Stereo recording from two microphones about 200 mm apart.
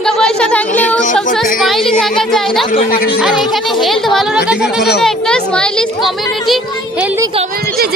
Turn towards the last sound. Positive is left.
turn(degrees=0)  # may be behind; listen again after turning